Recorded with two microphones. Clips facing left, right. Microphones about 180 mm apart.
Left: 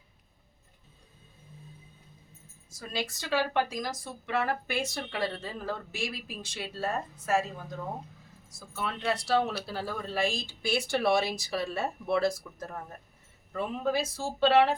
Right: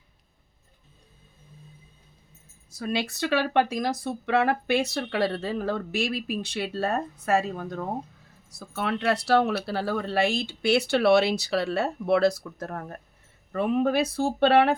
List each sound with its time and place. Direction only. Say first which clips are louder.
2.6 s speech: right 7 dB; 65° right (ahead or behind)